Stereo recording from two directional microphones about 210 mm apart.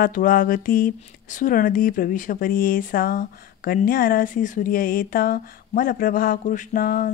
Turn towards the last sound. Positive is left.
turn(degrees=45)  # may be behind; listen again after turning